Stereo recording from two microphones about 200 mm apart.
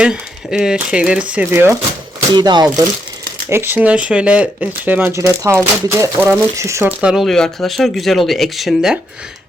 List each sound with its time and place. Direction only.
0.0 s speech: 5° right (ahead or behind); by 2.6 s 20° right (ahead or behind)
3.5 s speech: 10° right (ahead or behind)